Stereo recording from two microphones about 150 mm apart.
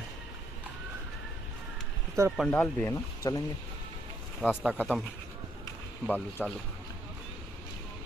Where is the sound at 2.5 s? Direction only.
10° left (ahead or behind).